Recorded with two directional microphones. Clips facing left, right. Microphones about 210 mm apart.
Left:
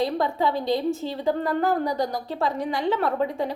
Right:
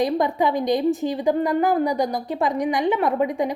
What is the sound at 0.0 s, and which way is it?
A woman's voice, 15° right (ahead or behind).